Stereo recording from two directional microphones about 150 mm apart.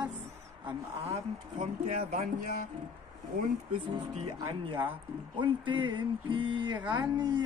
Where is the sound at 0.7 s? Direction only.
45° right (ahead or behind).